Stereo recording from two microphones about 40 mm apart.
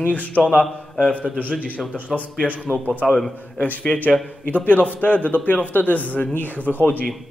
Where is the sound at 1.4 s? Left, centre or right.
Right.